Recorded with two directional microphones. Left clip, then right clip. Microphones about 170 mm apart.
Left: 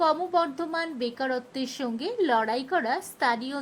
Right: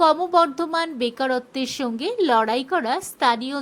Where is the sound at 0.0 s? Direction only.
20° right (ahead or behind).